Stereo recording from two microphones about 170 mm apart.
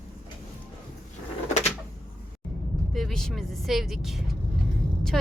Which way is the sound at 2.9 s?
Centre (ahead or behind).